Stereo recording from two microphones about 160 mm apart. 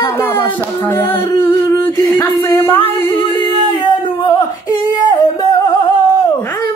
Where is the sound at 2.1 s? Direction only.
15° left (ahead or behind).